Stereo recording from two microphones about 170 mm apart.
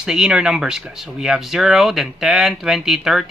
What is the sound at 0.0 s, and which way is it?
Speech, 5° right (ahead or behind).